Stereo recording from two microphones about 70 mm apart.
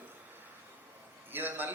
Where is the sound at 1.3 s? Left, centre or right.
Right.